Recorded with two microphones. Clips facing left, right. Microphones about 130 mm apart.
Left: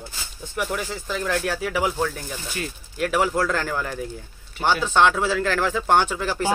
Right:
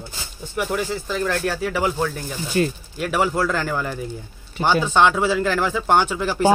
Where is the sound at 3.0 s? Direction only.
Centre (ahead or behind).